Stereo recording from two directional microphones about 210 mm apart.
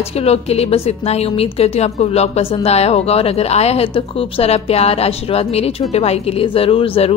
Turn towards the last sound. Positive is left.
turn(degrees=25)  # may be behind; listen again after turning